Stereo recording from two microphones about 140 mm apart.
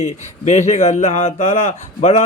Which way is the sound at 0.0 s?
55° left (ahead or behind).